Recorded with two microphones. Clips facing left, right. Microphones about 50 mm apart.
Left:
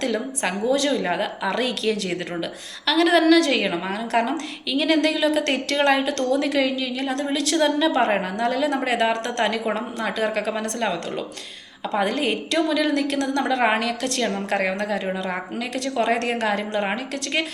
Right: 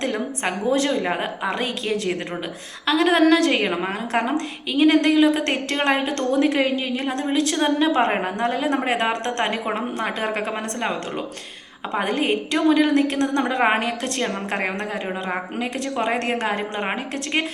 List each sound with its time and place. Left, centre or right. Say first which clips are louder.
0.0 s a woman's voice: even; right
11.9 s a woman's voice: right 1 dB; right